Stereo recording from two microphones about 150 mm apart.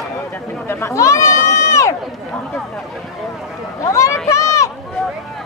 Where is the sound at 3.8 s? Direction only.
20° left (ahead or behind).